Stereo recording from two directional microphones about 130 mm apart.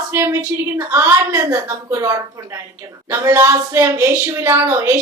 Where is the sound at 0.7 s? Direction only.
20° right (ahead or behind).